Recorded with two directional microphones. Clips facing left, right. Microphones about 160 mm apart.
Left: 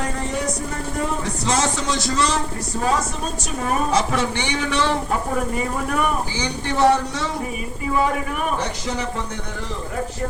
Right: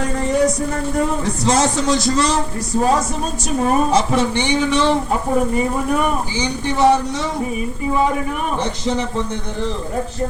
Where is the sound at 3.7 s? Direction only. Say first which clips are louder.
Right 4 dB; 25° right (ahead or behind).